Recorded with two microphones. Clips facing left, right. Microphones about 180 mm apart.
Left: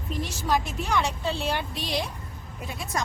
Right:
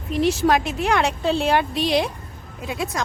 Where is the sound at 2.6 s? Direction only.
90° right.